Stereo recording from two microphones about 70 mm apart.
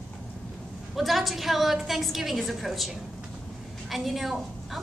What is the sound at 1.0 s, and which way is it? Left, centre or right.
A woman's voice, centre.